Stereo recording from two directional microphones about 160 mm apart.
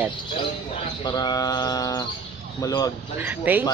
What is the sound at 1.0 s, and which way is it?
Bird, 25° left (ahead or behind).